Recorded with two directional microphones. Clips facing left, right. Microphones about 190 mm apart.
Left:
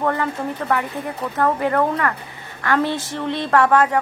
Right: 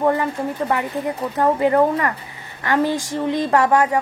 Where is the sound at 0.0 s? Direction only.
15° right (ahead or behind).